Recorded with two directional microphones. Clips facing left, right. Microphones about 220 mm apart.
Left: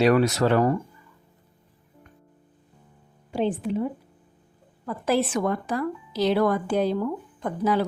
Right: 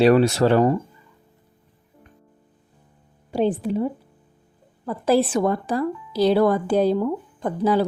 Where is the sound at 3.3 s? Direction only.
35° right (ahead or behind).